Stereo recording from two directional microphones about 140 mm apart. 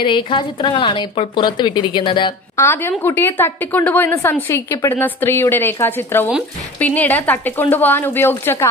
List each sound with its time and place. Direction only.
0.0 s a woman's voice: 35° left (ahead or behind)
2.5 s a woman's voice: 15° left (ahead or behind)